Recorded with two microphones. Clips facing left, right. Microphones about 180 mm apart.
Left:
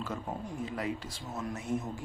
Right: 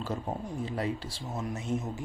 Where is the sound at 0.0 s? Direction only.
30° right (ahead or behind).